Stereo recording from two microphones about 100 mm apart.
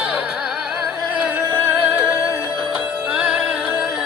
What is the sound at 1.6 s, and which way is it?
Music, 20° right (ahead or behind).